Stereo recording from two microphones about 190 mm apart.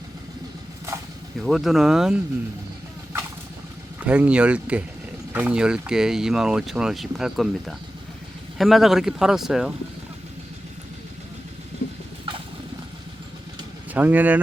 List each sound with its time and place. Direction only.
1.4 s speech: centre (ahead or behind)
4.0 s speech: 5° right (ahead or behind)
13.9 s speech: 10° right (ahead or behind)